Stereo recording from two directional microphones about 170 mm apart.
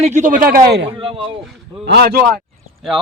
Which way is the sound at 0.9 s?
30° right (ahead or behind).